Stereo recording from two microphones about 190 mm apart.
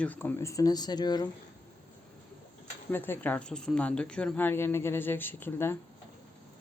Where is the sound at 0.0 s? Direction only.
10° left (ahead or behind).